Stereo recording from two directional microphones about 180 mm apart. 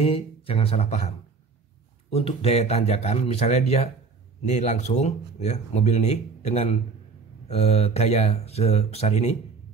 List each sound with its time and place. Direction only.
0.0 s speech: 30° left (ahead or behind)